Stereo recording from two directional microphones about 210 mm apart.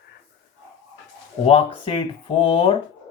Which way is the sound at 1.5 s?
30° left (ahead or behind).